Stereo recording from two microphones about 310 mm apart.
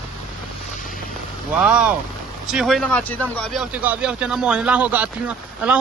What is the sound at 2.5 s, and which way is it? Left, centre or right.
Speech, centre.